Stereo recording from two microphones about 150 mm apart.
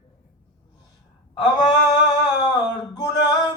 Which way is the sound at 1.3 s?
30° left (ahead or behind).